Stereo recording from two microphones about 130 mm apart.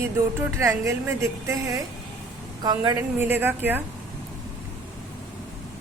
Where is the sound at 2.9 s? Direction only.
15° right (ahead or behind).